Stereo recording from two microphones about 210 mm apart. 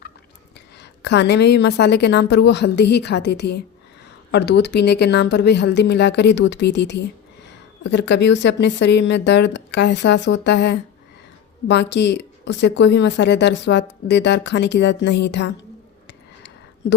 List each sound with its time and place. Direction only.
0.8 s a woman's voice: 55° left (ahead or behind)